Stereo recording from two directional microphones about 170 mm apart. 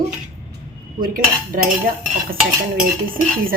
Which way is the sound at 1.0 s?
55° right (ahead or behind).